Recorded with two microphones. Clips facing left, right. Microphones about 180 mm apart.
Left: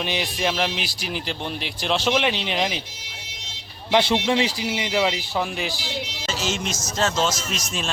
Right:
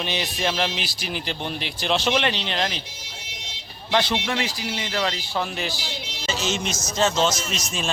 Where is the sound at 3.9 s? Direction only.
25° left (ahead or behind); by 7.9 s centre (ahead or behind).